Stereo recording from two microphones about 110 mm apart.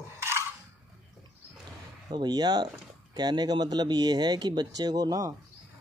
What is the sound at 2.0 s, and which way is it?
Speech, 40° right (ahead or behind).